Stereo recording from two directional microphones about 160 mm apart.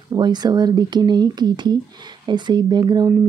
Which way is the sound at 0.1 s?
25° right (ahead or behind).